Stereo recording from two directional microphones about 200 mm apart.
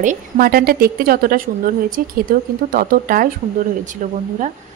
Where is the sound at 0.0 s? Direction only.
45° right (ahead or behind).